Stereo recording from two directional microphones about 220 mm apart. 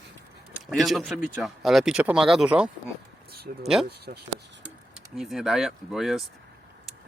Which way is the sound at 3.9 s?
45° right (ahead or behind).